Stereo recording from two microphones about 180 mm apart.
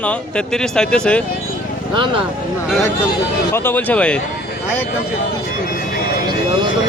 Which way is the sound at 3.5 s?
10° left (ahead or behind).